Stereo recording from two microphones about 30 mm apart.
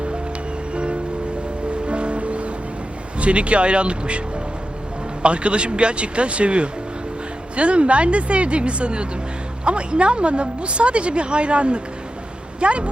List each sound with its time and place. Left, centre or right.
0.7 s music: right
3.2 s speech: right
5.2 s speech: right